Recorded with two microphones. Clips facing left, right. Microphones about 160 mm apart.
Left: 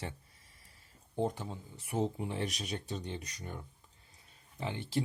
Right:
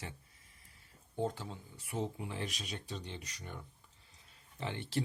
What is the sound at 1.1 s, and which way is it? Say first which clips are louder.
Speech: left 3 dB; 20° left (ahead or behind).